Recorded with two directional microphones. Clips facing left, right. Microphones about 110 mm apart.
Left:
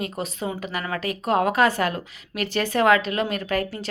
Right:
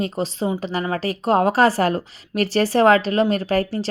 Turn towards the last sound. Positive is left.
turn(degrees=-35)  # may be behind; listen again after turning